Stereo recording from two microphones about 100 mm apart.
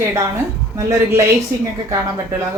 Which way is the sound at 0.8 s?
30° right (ahead or behind).